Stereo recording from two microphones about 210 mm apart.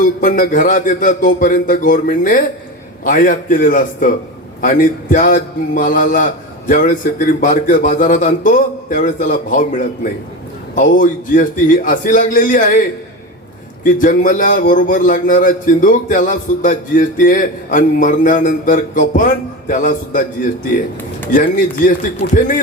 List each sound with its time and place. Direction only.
0.0 s a man's voice: 40° left (ahead or behind)
13.8 s a man's voice: 40° left (ahead or behind)
21.3 s a man's voice: 40° left (ahead or behind)